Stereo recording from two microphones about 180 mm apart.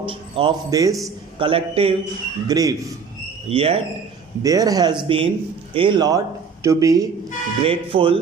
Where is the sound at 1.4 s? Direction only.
30° right (ahead or behind).